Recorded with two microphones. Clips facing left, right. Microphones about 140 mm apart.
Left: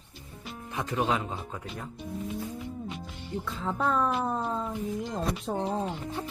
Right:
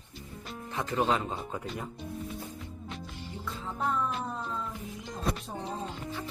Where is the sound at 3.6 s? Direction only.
90° left.